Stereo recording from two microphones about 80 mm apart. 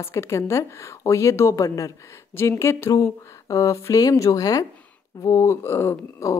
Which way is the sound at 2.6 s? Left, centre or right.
Left.